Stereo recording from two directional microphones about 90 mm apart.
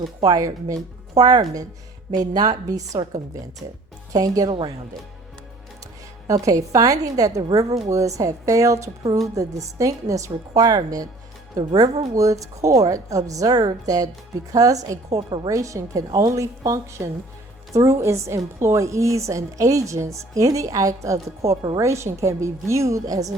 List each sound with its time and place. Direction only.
0.2 s speech: 40° right (ahead or behind)
4.1 s speech: 45° right (ahead or behind)
6.2 s a woman's voice: 40° right (ahead or behind)